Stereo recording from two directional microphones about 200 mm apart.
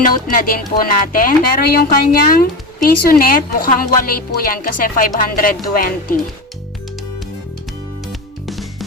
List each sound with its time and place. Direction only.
0.0 s speech: 45° left (ahead or behind)
8.0 s music: centre (ahead or behind)